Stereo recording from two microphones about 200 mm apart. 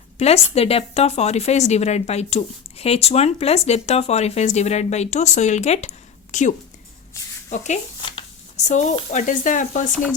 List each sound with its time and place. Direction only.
0.2 s a woman's voice: 30° left (ahead or behind)
8.0 s speech: 30° left (ahead or behind)